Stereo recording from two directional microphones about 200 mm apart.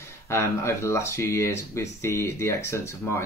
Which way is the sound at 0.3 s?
10° left (ahead or behind).